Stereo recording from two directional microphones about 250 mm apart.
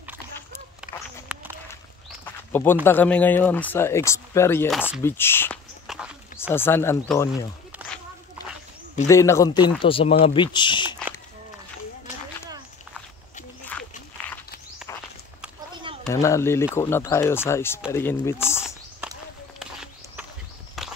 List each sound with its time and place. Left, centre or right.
0.9 s a sound: left
1.3 s walk: centre
2.5 s speech: centre
4.7 s speech: centre
5.0 s speech: centre
5.9 s a sound: centre
6.5 s speech: centre
9.0 s speech: centre
13.7 s a sound: centre
16.0 s speech: centre
19.6 s horse: centre
20.8 s walk: centre